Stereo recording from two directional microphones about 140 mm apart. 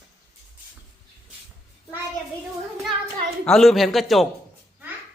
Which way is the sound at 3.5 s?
Centre (ahead or behind).